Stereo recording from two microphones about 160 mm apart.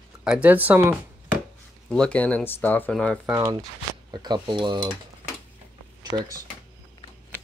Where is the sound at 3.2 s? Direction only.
20° right (ahead or behind).